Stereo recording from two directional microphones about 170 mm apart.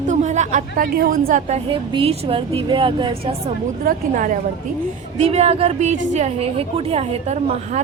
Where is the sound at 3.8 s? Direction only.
55° right (ahead or behind).